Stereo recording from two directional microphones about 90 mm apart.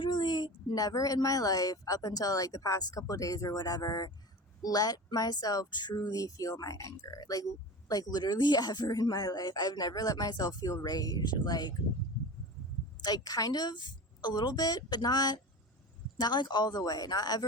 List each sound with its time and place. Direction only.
0.0 s a woman's voice: 55° left (ahead or behind)
13.0 s speech: 45° left (ahead or behind)